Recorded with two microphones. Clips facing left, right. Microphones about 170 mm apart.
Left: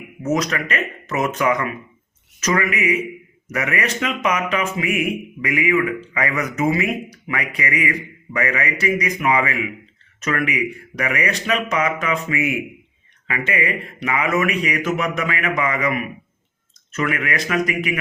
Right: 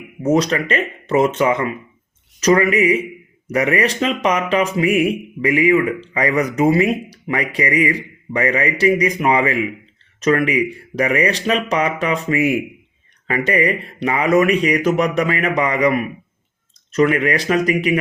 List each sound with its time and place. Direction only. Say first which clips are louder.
0.2 s speech: right 5 dB; 30° right (ahead or behind)